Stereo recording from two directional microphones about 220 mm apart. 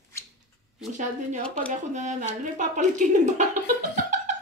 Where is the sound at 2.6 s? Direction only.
35° right (ahead or behind).